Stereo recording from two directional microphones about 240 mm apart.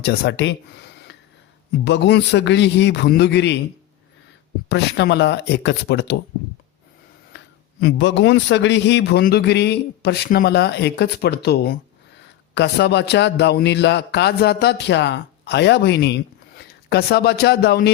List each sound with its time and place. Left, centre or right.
0.0 s a man's voice: left
4.7 s a man's voice: left
7.3 s a man's voice: left